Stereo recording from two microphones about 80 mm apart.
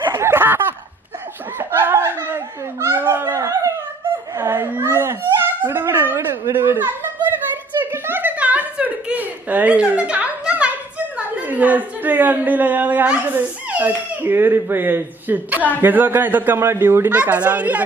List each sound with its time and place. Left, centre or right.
0.0 s a sound: right
15.8 s a man's voice: right
17.1 s a man's voice: centre